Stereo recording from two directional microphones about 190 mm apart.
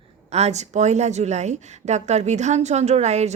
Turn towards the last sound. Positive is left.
turn(degrees=-35)  # may be behind; listen again after turning